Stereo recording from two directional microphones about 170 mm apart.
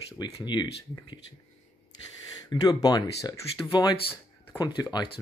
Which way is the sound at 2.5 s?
25° left (ahead or behind).